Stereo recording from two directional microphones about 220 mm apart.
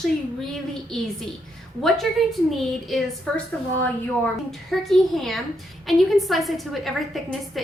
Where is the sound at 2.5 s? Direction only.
Centre (ahead or behind).